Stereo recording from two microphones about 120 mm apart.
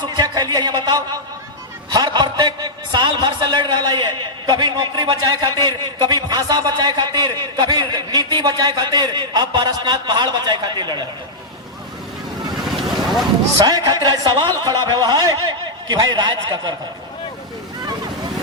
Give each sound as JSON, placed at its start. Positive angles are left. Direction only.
{"t": 0.0, "sound": "a man's voice", "side_deg": -35}
{"t": 1.9, "sound": "a sound", "side_deg": -35}
{"t": 2.9, "sound": "a man's voice", "side_deg": -40}
{"t": 13.7, "sound": "a man's voice", "side_deg": -35}